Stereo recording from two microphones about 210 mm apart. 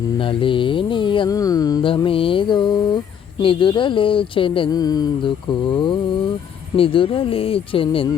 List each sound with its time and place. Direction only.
0.2 s mantra: 25° left (ahead or behind)